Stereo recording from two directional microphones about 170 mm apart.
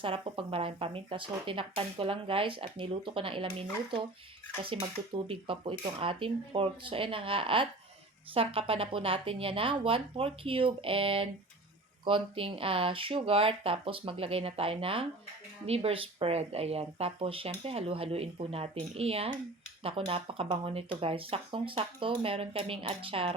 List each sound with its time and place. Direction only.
0.0 s speech: 30° right (ahead or behind)